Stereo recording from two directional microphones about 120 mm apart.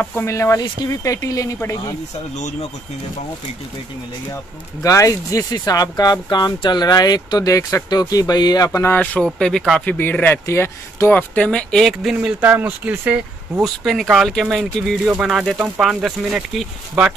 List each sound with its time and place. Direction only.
0.1 s speech: 25° left (ahead or behind)
4.8 s speech: 25° left (ahead or behind)
8.9 s speech: 10° left (ahead or behind)
15.0 s speech: 10° right (ahead or behind)